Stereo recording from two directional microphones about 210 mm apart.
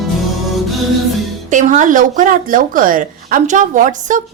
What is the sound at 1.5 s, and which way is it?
Speech, 35° right (ahead or behind).